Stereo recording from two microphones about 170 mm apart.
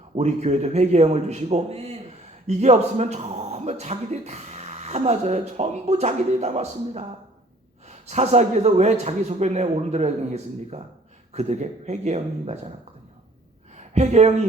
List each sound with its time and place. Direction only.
0.2 s speech: 40° right (ahead or behind)
13.7 s a woman's voice: 40° right (ahead or behind)